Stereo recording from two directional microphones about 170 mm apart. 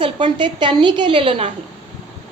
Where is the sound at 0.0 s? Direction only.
30° right (ahead or behind).